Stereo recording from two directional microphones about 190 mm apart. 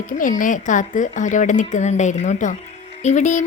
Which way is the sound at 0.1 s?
45° left (ahead or behind).